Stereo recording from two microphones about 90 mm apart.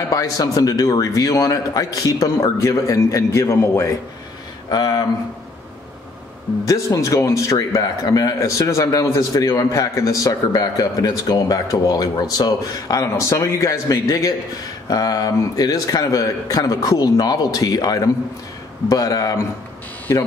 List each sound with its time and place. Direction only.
0.1 s speech: 40° left (ahead or behind)
4.6 s a man's voice: 50° left (ahead or behind)
6.6 s a man's voice: 35° left (ahead or behind)